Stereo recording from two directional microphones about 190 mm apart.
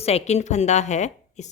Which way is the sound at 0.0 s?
35° left (ahead or behind).